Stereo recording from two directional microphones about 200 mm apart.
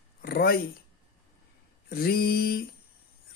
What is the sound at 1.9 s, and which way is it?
Music, 50° left (ahead or behind).